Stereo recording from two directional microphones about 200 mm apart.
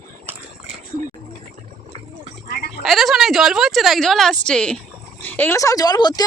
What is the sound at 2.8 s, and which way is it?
A woman's voice, centre (ahead or behind).